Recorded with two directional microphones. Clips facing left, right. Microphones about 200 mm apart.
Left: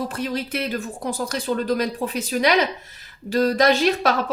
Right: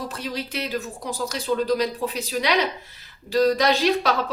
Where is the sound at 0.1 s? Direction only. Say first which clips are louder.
Left 4 dB; 50° left (ahead or behind).